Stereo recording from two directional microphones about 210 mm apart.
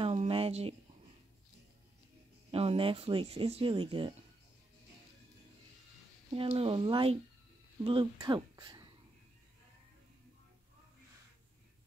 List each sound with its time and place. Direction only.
0.0 s a sound: 30° right (ahead or behind)
2.5 s speech: 30° right (ahead or behind)
6.3 s speech: 25° right (ahead or behind)